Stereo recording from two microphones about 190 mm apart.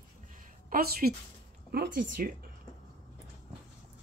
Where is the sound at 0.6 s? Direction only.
55° right (ahead or behind).